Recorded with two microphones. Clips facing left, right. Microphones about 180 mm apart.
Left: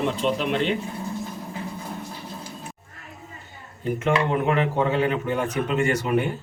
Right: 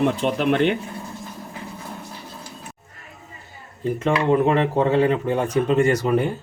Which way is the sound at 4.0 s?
35° right (ahead or behind).